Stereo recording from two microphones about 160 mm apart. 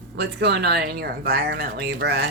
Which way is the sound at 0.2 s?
90° right.